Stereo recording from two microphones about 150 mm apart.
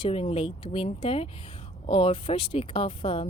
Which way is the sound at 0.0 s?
40° left (ahead or behind).